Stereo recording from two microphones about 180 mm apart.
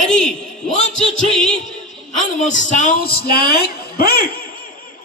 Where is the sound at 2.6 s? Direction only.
45° left (ahead or behind).